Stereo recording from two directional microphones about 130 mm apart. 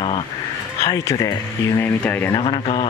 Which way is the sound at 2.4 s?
45° left (ahead or behind).